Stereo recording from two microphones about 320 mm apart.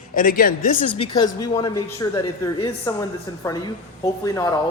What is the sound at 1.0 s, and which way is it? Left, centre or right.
A woman's voice, centre.